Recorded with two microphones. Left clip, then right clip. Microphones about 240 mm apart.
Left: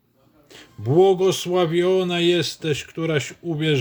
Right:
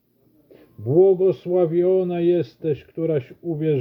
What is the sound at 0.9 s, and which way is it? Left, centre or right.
Speech, centre.